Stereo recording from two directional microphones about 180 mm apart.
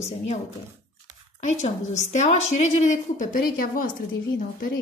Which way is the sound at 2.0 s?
40° left (ahead or behind).